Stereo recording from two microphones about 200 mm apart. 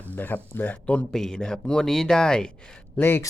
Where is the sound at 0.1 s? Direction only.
10° left (ahead or behind).